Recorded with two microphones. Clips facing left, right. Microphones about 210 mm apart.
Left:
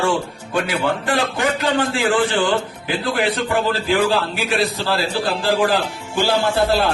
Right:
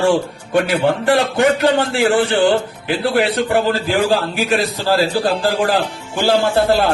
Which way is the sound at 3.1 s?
60° right (ahead or behind).